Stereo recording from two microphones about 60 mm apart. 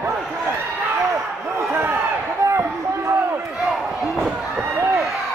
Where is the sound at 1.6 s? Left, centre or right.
Right.